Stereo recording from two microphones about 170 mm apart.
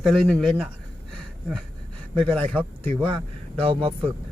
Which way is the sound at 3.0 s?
30° right (ahead or behind).